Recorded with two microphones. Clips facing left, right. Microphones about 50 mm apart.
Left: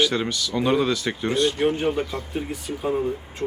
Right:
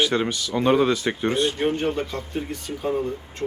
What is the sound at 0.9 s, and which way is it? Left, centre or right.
Speech, right.